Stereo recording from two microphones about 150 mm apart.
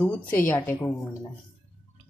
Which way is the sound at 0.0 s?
10° left (ahead or behind).